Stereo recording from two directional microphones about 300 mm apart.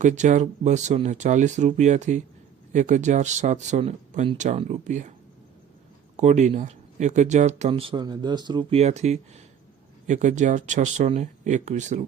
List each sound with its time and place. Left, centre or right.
0.0 s speech: right
6.1 s speech: right